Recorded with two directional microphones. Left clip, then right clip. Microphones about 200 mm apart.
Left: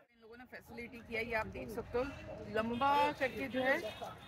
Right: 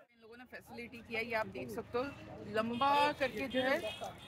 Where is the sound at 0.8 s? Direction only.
10° right (ahead or behind).